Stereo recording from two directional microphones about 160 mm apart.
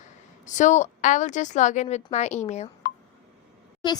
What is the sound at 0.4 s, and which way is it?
A woman's voice, 50° left (ahead or behind).